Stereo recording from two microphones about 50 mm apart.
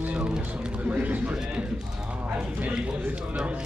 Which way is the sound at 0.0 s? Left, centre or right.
Right.